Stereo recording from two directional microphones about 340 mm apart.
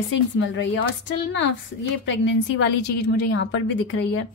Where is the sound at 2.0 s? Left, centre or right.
Left.